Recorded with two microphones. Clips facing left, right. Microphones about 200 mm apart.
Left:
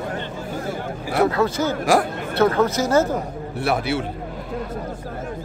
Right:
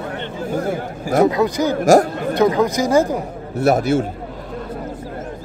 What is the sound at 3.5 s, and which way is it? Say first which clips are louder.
Speech: right 7 dB; 45° right (ahead or behind).